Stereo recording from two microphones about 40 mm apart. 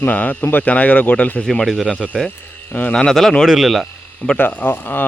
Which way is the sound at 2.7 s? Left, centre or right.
Left.